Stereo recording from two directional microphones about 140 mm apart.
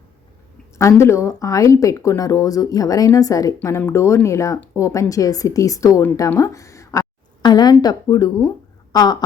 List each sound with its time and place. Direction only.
0.8 s speech: 20° left (ahead or behind)